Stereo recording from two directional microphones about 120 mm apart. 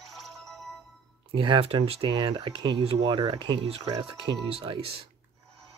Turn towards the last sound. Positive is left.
turn(degrees=-50)  # may be behind; listen again after turning